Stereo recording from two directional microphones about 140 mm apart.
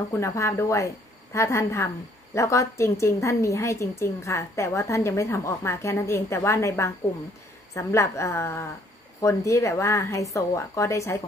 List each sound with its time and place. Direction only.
0.1 s a woman's voice: 20° left (ahead or behind)